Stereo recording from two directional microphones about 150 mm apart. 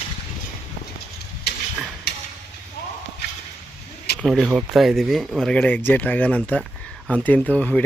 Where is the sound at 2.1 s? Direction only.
90° left.